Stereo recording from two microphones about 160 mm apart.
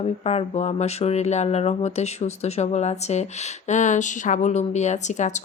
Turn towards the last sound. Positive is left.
turn(degrees=50)  # may be behind; listen again after turning